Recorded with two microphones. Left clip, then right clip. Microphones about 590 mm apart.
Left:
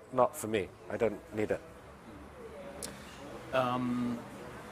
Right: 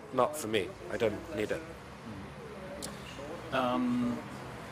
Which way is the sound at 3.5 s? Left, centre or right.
Centre.